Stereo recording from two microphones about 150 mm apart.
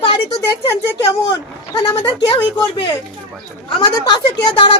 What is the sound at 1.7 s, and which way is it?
Speech, 30° left (ahead or behind).